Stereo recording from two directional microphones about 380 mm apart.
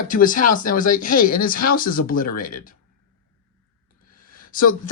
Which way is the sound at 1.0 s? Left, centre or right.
Left.